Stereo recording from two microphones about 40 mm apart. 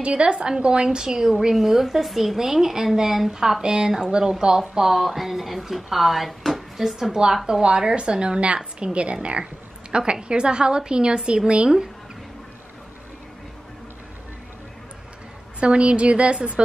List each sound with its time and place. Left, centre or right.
0.0 s a woman's voice: right
1.5 s a woman's voice: centre; by 11.9 s right
15.6 s a woman's voice: right